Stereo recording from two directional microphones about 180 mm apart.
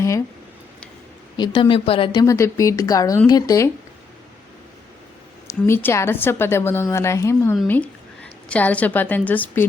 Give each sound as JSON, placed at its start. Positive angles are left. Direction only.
{"t": 1.4, "sound": "speech", "side_deg": 25}
{"t": 2.2, "sound": "a woman's voice", "side_deg": 15}
{"t": 5.5, "sound": "a woman's voice", "side_deg": 15}